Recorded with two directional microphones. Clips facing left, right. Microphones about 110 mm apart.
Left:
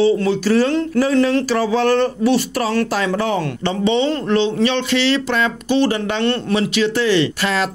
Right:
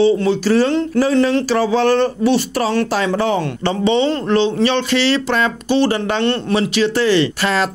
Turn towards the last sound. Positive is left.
turn(degrees=-40)  # may be behind; listen again after turning